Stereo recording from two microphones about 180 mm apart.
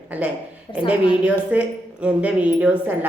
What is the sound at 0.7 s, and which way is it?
Speech, 25° left (ahead or behind).